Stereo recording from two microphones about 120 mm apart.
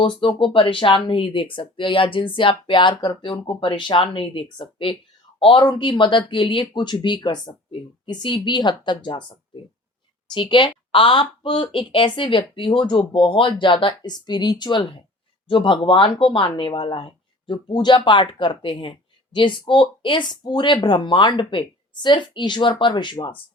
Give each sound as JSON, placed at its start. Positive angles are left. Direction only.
{"t": 0.0, "sound": "speech", "side_deg": 45}
{"t": 10.3, "sound": "speech", "side_deg": 40}